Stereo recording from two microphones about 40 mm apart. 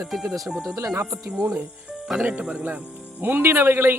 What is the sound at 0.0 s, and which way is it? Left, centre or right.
Speech, centre.